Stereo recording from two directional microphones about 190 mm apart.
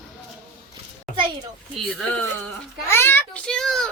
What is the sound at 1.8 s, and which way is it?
A child's voice, 5° left (ahead or behind).